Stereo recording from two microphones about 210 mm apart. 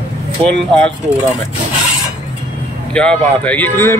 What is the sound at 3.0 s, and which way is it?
A man's voice, 5° left (ahead or behind).